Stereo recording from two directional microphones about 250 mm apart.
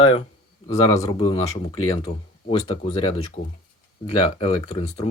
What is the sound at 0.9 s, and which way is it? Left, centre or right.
Speech, centre.